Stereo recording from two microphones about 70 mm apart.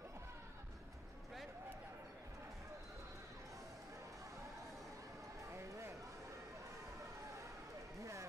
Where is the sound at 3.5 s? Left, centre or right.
Right.